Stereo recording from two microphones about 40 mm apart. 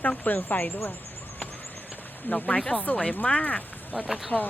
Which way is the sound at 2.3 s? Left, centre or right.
Left.